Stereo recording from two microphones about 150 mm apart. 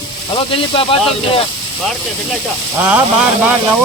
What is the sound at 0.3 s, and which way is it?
Speech, 35° left (ahead or behind).